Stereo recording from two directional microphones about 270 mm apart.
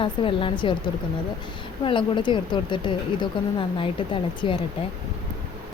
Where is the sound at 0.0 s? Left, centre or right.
Centre.